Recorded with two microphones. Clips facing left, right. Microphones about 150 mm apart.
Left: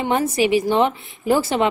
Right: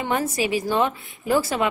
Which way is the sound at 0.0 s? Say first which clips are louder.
Left 5 dB; 25° left (ahead or behind).